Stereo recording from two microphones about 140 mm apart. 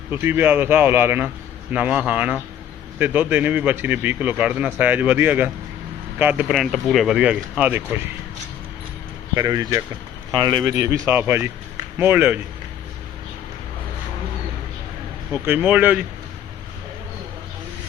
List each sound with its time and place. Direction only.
0.1 s a man's voice: 15° right (ahead or behind)
6.5 s speech: centre (ahead or behind)
9.3 s a man's voice: 25° right (ahead or behind)
15.3 s a man's voice: 15° right (ahead or behind)